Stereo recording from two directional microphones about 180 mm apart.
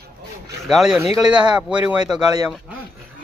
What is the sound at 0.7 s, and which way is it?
Speech, centre (ahead or behind).